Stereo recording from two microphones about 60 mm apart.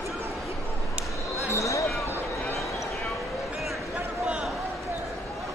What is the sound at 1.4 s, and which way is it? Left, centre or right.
Basketball bounce, left.